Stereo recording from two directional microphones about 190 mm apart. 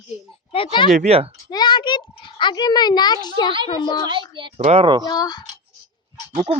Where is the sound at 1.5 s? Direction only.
20° left (ahead or behind).